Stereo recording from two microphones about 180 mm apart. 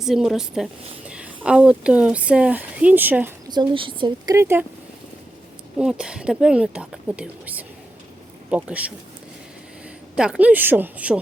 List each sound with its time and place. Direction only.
0.0 s a woman's voice: centre (ahead or behind)
3.5 s speech: 25° right (ahead or behind)
4.4 s a woman's voice: 15° right (ahead or behind)
5.8 s a woman's voice: 5° right (ahead or behind)
10.2 s a woman's voice: 5° right (ahead or behind)